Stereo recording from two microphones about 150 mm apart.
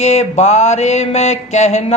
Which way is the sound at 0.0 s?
45° left (ahead or behind).